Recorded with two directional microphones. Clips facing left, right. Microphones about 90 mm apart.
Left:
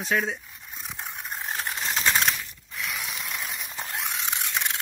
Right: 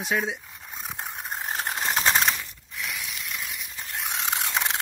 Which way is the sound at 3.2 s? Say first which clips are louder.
Left 1 dB; 35° left (ahead or behind).